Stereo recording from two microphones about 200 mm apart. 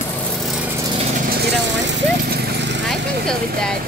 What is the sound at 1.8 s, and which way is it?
Horse, 50° right (ahead or behind).